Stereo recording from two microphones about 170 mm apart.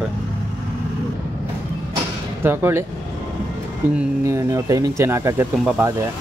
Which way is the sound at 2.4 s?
15° right (ahead or behind).